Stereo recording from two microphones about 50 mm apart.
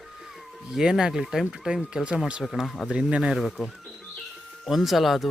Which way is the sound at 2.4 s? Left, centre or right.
Centre.